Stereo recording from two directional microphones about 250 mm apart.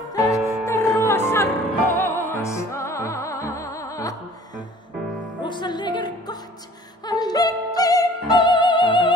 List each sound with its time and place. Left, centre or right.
0.1 s music: centre
7.1 s opera: centre